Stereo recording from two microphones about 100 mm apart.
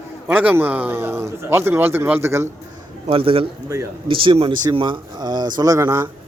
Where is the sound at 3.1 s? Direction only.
65° right (ahead or behind).